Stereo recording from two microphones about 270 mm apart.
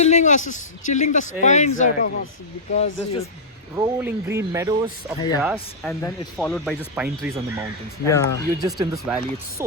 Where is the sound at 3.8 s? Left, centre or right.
Centre.